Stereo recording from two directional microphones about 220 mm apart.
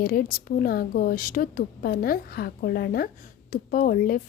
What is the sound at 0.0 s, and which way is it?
A woman's voice, 40° left (ahead or behind).